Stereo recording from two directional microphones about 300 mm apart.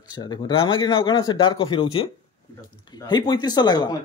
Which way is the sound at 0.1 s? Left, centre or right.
Centre.